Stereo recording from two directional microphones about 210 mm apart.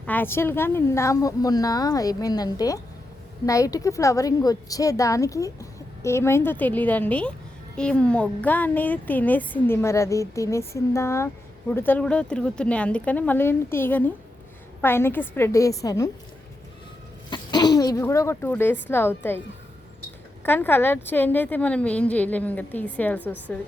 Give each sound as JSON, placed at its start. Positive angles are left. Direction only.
{"t": 0.0, "sound": "a woman's voice", "side_deg": 10}
{"t": 17.2, "sound": "speech", "side_deg": 20}
{"t": 20.4, "sound": "a woman's voice", "side_deg": 10}